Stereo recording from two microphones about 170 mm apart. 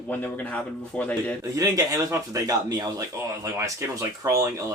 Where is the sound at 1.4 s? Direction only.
20° right (ahead or behind).